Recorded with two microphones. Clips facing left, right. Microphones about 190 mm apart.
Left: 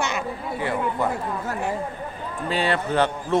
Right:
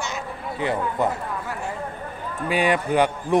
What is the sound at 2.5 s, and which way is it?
Speech, 15° right (ahead or behind).